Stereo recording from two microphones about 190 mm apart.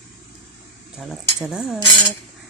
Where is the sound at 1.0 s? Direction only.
Centre (ahead or behind).